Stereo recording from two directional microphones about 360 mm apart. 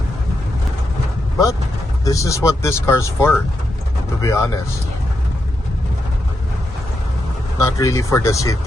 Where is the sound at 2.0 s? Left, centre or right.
Centre.